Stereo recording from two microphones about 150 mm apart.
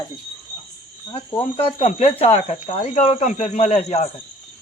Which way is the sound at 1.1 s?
40° left (ahead or behind).